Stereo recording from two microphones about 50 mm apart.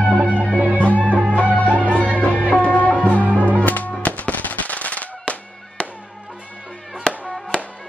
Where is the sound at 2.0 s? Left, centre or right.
Left.